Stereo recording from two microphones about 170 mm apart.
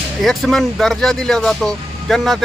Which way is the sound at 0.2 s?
Centre (ahead or behind).